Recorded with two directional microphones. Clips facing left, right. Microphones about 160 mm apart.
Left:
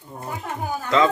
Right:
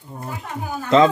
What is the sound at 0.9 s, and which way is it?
Speech, 25° right (ahead or behind).